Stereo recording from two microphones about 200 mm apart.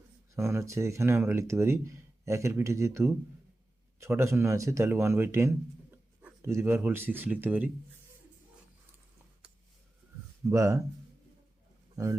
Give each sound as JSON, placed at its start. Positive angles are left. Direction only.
{"t": 0.3, "sound": "speech", "side_deg": -15}
{"t": 10.5, "sound": "speech", "side_deg": -15}